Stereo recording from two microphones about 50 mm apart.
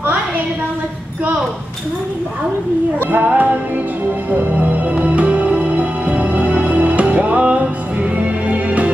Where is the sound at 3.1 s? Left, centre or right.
Right.